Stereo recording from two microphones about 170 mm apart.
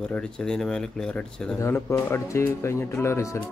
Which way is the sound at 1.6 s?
15° left (ahead or behind).